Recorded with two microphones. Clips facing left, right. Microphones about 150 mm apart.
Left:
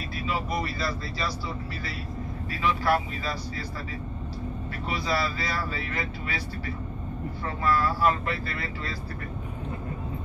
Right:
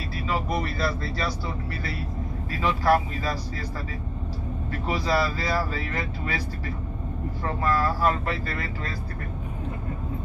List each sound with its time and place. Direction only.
0.3 s speech: 55° right (ahead or behind)
2.6 s speech: 40° right (ahead or behind)
4.8 s speech: 40° right (ahead or behind)
7.6 s speech: 40° right (ahead or behind)